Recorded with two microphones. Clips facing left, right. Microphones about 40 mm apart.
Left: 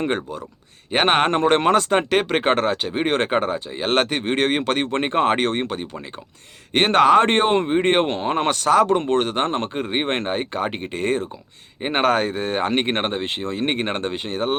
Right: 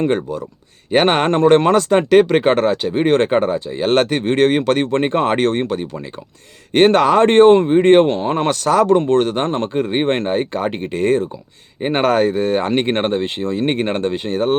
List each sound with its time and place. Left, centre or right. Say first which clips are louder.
0.0 s speech: right 6 dB; left
6.7 s speech: right 3 dB; left